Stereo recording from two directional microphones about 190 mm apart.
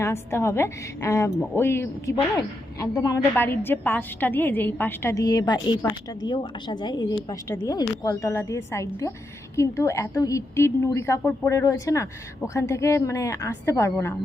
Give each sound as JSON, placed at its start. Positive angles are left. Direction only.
{"t": 0.0, "sound": "a woman's voice", "side_deg": 15}